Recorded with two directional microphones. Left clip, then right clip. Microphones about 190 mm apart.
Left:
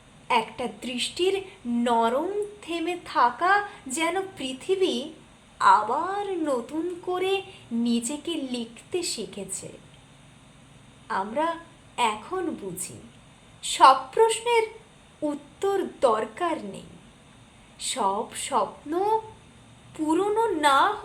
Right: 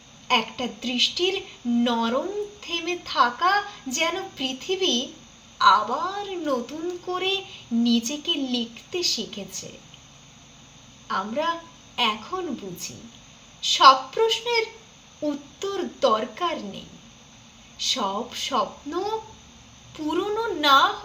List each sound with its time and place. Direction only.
0.3 s a woman's voice: 15° left (ahead or behind)
11.1 s a woman's voice: 15° left (ahead or behind)
13.6 s a woman's voice: 15° left (ahead or behind)